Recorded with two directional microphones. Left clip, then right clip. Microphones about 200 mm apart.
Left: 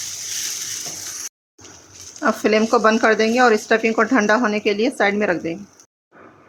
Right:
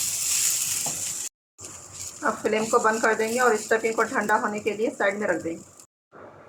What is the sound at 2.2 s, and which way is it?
Speech, 65° left (ahead or behind).